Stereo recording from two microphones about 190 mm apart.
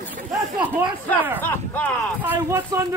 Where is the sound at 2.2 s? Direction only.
10° right (ahead or behind).